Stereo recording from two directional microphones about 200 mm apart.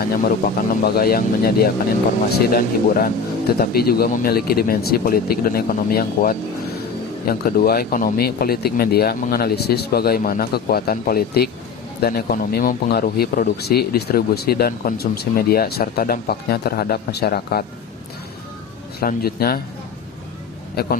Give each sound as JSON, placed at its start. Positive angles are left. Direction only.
{"t": 0.0, "sound": "speech", "side_deg": 50}
{"t": 18.9, "sound": "speech", "side_deg": 50}
{"t": 20.8, "sound": "speech", "side_deg": 55}